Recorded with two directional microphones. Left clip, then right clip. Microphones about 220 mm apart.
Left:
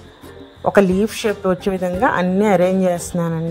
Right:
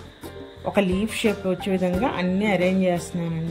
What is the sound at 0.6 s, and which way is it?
Speech, 65° left (ahead or behind).